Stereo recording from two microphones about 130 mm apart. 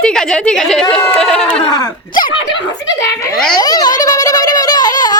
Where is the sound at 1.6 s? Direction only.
30° left (ahead or behind).